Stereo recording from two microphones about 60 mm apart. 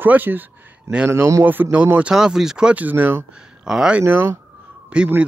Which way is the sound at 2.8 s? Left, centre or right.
Right.